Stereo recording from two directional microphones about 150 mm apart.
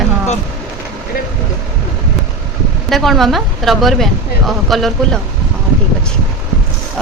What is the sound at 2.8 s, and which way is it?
Speech, centre (ahead or behind).